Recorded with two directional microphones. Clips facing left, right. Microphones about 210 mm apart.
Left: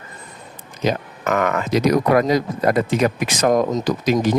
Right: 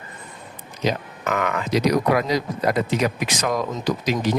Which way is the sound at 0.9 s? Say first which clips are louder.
Left 3 dB; 45° left (ahead or behind).